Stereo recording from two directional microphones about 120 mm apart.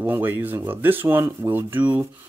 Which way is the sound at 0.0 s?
15° right (ahead or behind).